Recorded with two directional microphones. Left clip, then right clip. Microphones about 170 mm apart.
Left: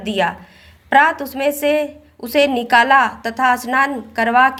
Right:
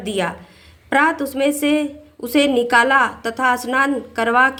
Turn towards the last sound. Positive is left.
turn(degrees=20)  # may be behind; listen again after turning